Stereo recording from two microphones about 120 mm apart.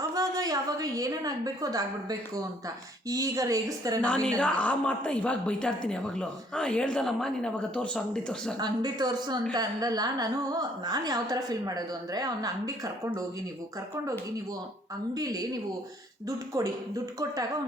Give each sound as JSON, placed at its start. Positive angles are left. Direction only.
{"t": 0.1, "sound": "a woman's voice", "side_deg": -30}
{"t": 4.0, "sound": "speech", "side_deg": 10}
{"t": 8.5, "sound": "a woman's voice", "side_deg": -35}
{"t": 15.1, "sound": "a woman's voice", "side_deg": -30}
{"t": 16.6, "sound": "speech", "side_deg": -30}